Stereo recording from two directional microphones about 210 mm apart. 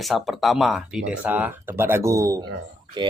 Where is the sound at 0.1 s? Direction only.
Centre (ahead or behind).